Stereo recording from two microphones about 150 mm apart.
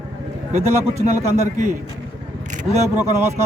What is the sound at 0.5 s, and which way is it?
A man's voice, 45° right (ahead or behind).